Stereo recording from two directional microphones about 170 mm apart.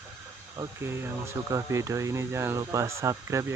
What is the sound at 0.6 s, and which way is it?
Speech, 15° right (ahead or behind).